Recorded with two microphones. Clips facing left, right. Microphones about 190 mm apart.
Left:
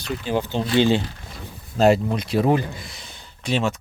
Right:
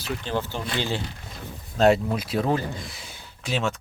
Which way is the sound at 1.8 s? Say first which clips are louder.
Left 2 dB; centre (ahead or behind).